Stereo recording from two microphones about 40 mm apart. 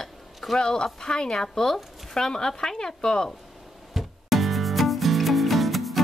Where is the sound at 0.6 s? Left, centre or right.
Centre.